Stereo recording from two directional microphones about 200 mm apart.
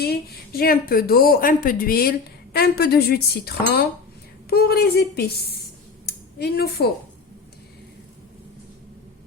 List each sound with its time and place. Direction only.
0.0 s a woman's voice: 50° left (ahead or behind)